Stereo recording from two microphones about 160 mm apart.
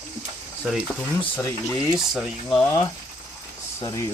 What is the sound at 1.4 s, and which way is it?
Speech, 20° left (ahead or behind).